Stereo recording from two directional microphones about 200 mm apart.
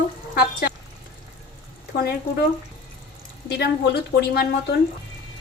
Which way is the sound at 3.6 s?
55° left (ahead or behind).